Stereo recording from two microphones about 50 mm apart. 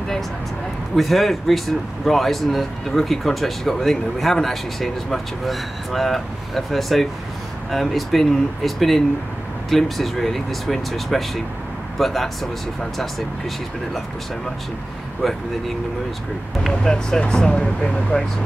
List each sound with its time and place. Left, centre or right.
0.9 s speech: centre
15.2 s speech: centre
16.8 s speech: centre